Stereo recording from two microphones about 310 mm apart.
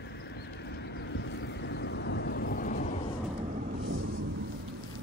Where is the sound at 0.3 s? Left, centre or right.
Left.